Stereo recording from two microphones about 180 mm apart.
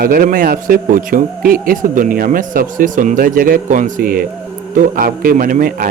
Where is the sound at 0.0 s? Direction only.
50° right (ahead or behind).